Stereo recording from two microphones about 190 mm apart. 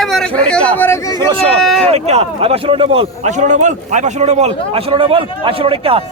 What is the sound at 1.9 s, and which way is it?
A man's voice, 35° right (ahead or behind).